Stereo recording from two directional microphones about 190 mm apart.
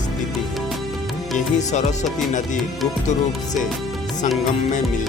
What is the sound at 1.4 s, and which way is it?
Speech, 40° left (ahead or behind).